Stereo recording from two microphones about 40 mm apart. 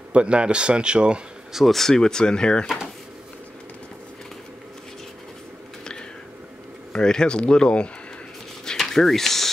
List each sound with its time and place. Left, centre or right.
0.1 s speech: right
1.7 s speech: centre
6.9 s speech: centre
8.6 s a sound: centre